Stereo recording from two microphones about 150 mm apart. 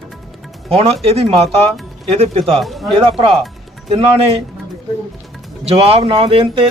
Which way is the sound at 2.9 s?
40° right (ahead or behind).